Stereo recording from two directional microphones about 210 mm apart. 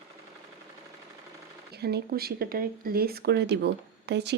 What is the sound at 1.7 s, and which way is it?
Speech, 50° right (ahead or behind).